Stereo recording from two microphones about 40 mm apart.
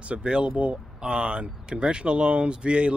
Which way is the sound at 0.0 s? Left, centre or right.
Right.